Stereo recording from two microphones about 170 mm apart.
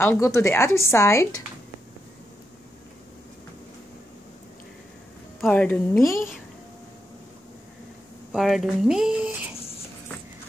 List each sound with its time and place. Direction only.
0.0 s a woman's voice: 15° left (ahead or behind)
5.4 s speech: 5° left (ahead or behind)
8.3 s speech: centre (ahead or behind)